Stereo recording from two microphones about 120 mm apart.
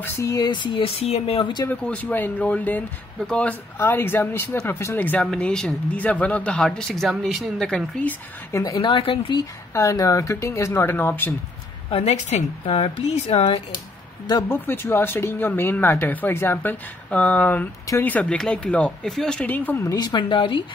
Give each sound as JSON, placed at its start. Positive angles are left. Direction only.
{"t": 0.0, "sound": "speech", "side_deg": 25}
{"t": 1.7, "sound": "speech", "side_deg": 10}
{"t": 8.5, "sound": "speech", "side_deg": 25}
{"t": 8.8, "sound": "speech", "side_deg": 45}
{"t": 9.8, "sound": "speech", "side_deg": 25}
{"t": 11.9, "sound": "a woman's voice", "side_deg": 60}
{"t": 14.5, "sound": "speech", "side_deg": 20}
{"t": 20.0, "sound": "speech", "side_deg": 40}